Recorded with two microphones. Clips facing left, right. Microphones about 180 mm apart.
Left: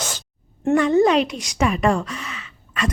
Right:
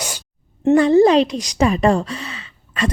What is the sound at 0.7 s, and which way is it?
A woman's voice, 35° right (ahead or behind).